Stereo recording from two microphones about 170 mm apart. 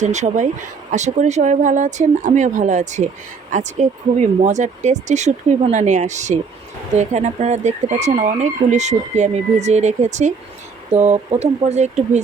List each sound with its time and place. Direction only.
0.0 s speech: 45° right (ahead or behind)